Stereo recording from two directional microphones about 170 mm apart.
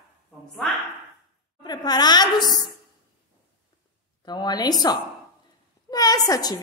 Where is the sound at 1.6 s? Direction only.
25° left (ahead or behind).